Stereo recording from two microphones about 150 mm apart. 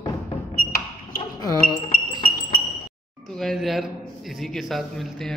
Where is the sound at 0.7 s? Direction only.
70° left (ahead or behind).